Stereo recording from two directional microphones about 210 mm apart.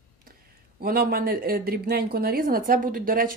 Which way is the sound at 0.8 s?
45° right (ahead or behind).